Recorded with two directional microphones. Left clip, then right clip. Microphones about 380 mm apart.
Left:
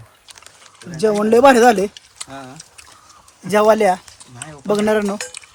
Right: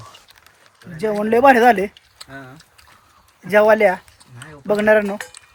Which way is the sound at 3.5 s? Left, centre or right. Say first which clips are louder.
Even; centre.